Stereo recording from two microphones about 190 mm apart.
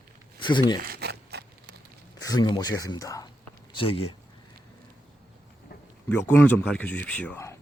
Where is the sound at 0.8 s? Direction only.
55° right (ahead or behind).